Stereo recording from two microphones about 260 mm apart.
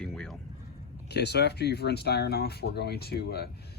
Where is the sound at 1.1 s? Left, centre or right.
Left.